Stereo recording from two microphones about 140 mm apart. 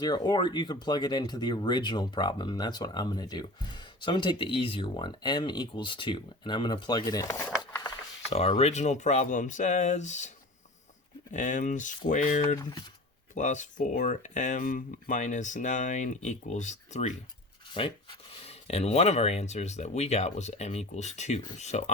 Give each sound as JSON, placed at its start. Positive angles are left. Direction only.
{"t": 0.0, "sound": "speech", "side_deg": 30}
{"t": 8.3, "sound": "speech", "side_deg": 45}
{"t": 17.7, "sound": "speech", "side_deg": 35}